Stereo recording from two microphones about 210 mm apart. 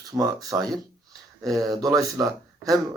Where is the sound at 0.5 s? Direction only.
10° right (ahead or behind).